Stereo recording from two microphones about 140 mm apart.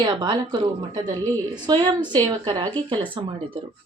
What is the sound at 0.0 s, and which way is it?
Speech, 30° right (ahead or behind).